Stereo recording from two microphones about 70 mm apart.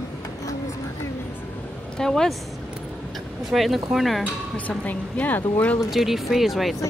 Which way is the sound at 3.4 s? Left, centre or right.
Centre.